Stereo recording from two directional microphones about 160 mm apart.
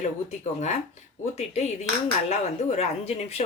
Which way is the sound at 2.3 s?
45° left (ahead or behind).